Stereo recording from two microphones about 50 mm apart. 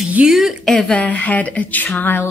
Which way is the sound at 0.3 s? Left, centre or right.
Centre.